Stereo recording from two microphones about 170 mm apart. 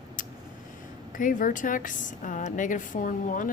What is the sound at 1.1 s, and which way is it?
A woman's voice, 50° left (ahead or behind).